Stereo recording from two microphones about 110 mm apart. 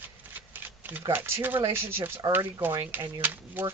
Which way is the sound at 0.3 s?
15° right (ahead or behind).